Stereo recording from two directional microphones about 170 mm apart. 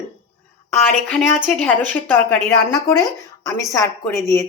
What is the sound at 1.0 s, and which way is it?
Speech, 5° left (ahead or behind).